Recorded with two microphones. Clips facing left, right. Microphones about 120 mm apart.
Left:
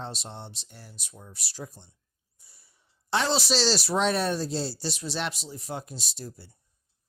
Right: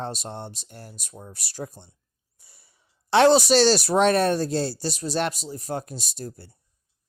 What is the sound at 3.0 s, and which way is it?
Speech, 65° right (ahead or behind).